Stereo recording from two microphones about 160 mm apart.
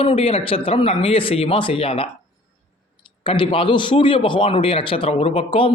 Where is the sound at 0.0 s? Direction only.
35° left (ahead or behind).